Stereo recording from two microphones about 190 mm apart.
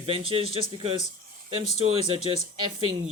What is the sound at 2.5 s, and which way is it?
Speech, 25° right (ahead or behind).